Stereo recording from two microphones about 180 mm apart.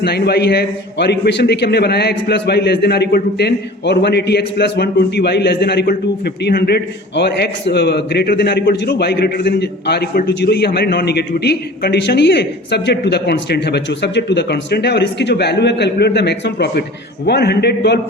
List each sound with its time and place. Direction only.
0.0 s a man's voice: 65° left (ahead or behind)